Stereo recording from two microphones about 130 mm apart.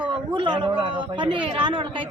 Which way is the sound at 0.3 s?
40° right (ahead or behind).